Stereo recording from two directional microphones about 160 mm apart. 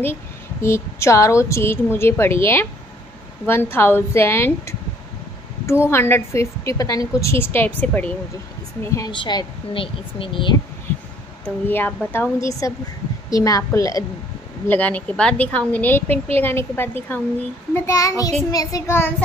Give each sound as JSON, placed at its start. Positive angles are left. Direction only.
{"t": 0.0, "sound": "a woman's voice", "side_deg": 15}
{"t": 5.9, "sound": "a woman's voice", "side_deg": 15}
{"t": 8.9, "sound": "speech", "side_deg": 30}
{"t": 11.4, "sound": "a woman's voice", "side_deg": 10}
{"t": 14.7, "sound": "a woman's voice", "side_deg": 10}